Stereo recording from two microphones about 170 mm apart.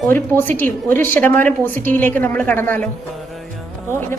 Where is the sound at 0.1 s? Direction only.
10° left (ahead or behind).